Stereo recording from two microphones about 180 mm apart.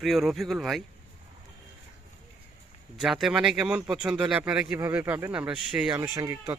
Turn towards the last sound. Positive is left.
turn(degrees=-15)  # may be behind; listen again after turning